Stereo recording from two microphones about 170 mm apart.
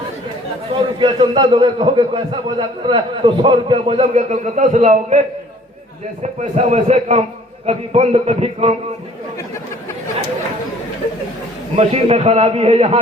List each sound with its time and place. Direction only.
0.9 s a man's voice: 30° right (ahead or behind)
6.2 s a man's voice: 40° right (ahead or behind)
11.8 s a man's voice: 35° right (ahead or behind)